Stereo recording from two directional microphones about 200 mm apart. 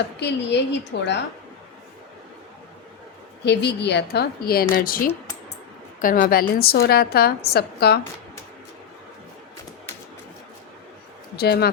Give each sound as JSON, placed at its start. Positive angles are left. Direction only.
{"t": 0.2, "sound": "a woman's voice", "side_deg": 60}
{"t": 3.4, "sound": "a woman's voice", "side_deg": 60}
{"t": 11.3, "sound": "a woman's voice", "side_deg": 50}